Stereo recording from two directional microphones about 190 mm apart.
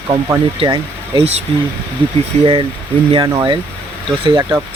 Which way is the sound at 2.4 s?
25° right (ahead or behind).